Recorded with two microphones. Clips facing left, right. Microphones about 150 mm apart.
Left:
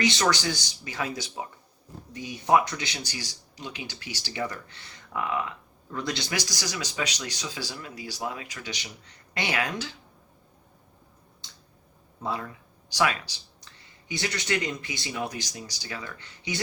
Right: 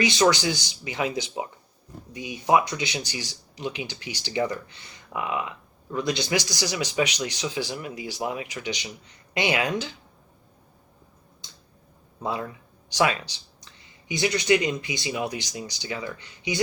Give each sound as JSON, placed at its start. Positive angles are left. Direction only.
{"t": 0.2, "sound": "speech", "side_deg": -15}
{"t": 12.2, "sound": "speech", "side_deg": -20}